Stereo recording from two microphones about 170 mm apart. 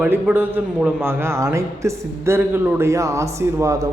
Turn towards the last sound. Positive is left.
turn(degrees=-20)  # may be behind; listen again after turning